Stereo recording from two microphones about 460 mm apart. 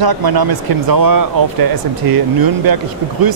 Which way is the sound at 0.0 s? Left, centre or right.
Right.